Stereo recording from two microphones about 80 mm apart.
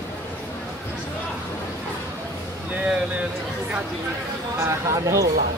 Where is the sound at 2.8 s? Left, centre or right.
Centre.